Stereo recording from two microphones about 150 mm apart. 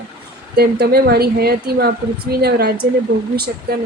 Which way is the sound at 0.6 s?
90° right.